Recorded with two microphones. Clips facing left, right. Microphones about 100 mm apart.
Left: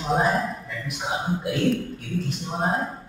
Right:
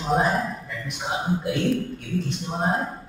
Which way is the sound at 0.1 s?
Centre (ahead or behind).